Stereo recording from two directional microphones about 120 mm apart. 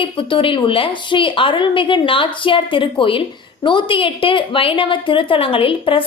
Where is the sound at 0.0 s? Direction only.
45° left (ahead or behind).